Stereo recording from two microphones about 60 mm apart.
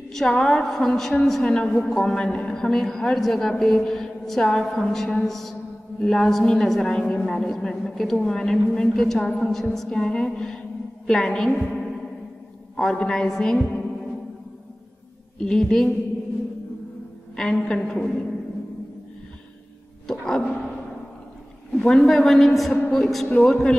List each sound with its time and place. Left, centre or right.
0.1 s a woman's voice: centre
1.5 s a woman's voice: centre
12.7 s a woman's voice: centre
15.3 s a woman's voice: centre
17.4 s a woman's voice: centre
20.1 s a sound: centre
21.7 s a man's voice: centre